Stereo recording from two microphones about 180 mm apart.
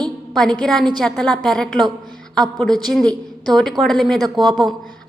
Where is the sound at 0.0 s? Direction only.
5° left (ahead or behind).